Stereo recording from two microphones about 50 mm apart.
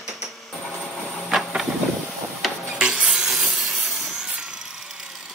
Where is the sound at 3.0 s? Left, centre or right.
Centre.